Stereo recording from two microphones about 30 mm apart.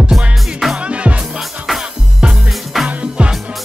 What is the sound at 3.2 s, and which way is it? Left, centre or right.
Music, right.